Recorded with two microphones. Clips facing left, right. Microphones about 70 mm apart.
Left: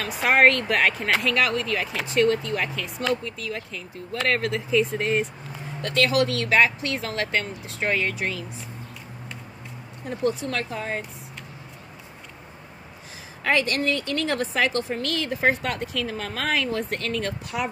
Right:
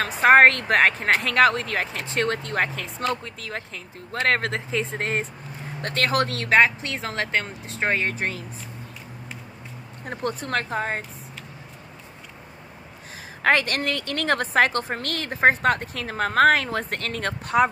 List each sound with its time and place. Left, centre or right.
0.0 s a woman's voice: right
10.0 s a woman's voice: right
13.4 s a woman's voice: right